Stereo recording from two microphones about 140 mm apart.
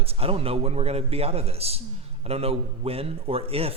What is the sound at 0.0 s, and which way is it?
A man's voice, 45° right (ahead or behind).